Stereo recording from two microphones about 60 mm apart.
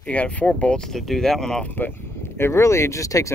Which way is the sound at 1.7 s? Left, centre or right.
Left.